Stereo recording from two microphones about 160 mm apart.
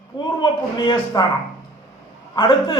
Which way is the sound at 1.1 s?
25° left (ahead or behind).